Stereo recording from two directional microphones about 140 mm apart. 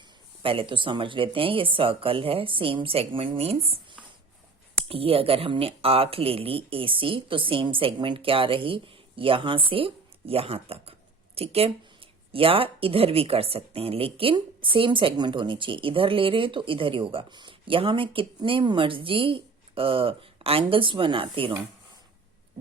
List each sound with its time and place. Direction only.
0.4 s a woman's voice: 40° right (ahead or behind)
4.9 s a woman's voice: 40° right (ahead or behind)